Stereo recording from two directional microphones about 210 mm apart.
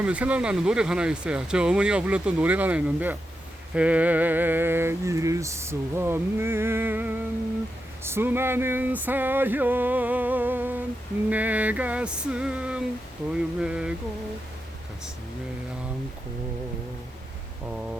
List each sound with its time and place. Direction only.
0.0 s speech: 5° right (ahead or behind)
3.8 s a sound: 5° right (ahead or behind)
11.3 s speech: 5° right (ahead or behind)